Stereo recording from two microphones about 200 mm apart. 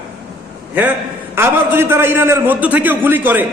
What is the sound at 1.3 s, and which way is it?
A man's voice, 10° right (ahead or behind).